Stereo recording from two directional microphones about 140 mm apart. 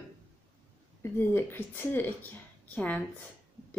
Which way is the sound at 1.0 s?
15° left (ahead or behind).